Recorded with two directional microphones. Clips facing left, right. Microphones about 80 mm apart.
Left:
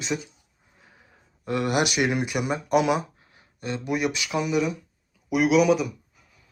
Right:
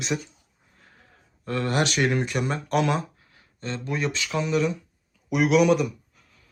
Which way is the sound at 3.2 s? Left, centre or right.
Left.